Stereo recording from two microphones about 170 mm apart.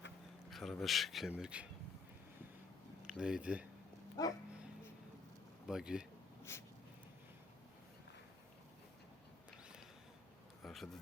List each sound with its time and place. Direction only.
0.5 s speech: centre (ahead or behind)
3.1 s speech: 5° right (ahead or behind)
4.2 s speech: 20° left (ahead or behind)
5.6 s speech: 5° right (ahead or behind)
6.5 s snort: 15° left (ahead or behind)
10.6 s a sound: centre (ahead or behind)